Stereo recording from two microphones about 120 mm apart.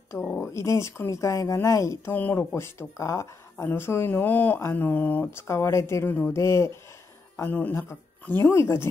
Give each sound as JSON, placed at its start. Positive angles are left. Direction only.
{"t": 0.1, "sound": "speech", "side_deg": 15}